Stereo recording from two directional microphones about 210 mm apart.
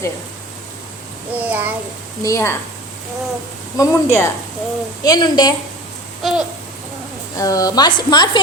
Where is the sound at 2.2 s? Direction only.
15° left (ahead or behind).